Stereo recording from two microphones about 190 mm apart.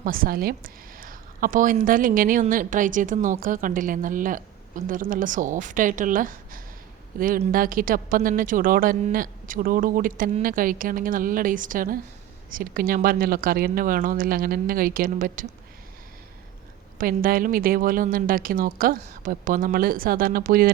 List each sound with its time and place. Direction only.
0.0 s a woman's voice: 50° right (ahead or behind)
17.0 s a woman's voice: 50° right (ahead or behind)